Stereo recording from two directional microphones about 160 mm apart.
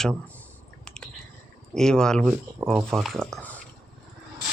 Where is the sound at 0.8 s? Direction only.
5° left (ahead or behind).